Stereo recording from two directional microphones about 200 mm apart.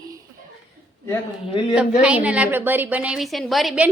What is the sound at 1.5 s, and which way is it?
Speech, 25° left (ahead or behind).